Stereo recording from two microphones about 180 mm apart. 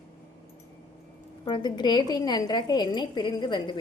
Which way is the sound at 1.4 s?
25° left (ahead or behind).